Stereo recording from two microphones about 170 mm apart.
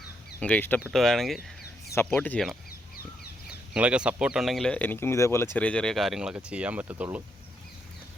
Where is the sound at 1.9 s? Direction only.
10° left (ahead or behind).